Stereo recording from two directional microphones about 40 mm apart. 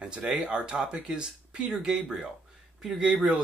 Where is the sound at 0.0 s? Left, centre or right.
Right.